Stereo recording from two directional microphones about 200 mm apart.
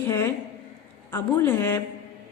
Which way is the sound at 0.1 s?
15° left (ahead or behind).